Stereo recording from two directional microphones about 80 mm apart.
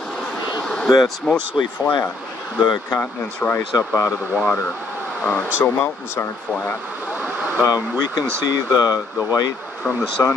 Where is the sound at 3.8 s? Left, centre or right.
Left.